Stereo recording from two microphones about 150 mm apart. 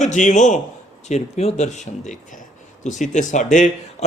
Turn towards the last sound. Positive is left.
turn(degrees=55)  # may be behind; listen again after turning